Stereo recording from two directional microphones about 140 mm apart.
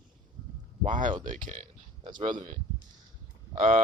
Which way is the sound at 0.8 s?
65° right (ahead or behind).